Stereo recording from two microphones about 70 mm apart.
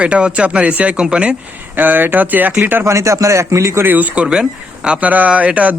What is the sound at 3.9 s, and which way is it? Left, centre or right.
Speech, right.